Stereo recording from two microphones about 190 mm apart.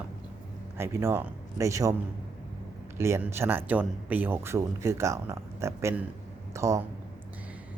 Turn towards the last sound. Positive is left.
turn(degrees=-15)  # may be behind; listen again after turning